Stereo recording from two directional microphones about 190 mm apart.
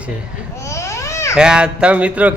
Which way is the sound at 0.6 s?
15° left (ahead or behind).